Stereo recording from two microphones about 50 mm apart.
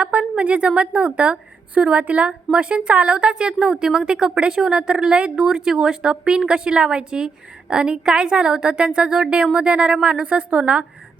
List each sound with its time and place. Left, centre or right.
0.0 s a woman's voice: right